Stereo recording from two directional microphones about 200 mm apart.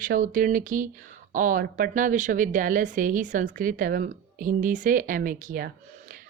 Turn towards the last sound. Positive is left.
turn(degrees=-40)  # may be behind; listen again after turning